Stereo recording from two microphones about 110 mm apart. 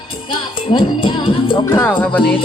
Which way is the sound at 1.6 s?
20° left (ahead or behind).